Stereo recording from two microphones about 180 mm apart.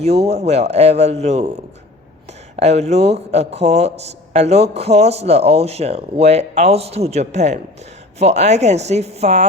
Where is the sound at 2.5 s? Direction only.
40° right (ahead or behind).